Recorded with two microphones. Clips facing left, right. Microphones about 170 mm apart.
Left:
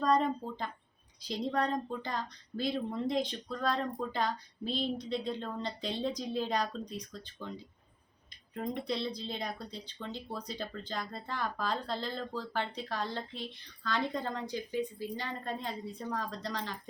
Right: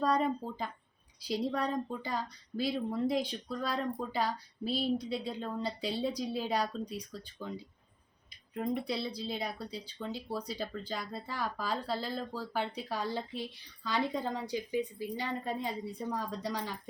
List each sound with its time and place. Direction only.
0.0 s speech: 5° right (ahead or behind)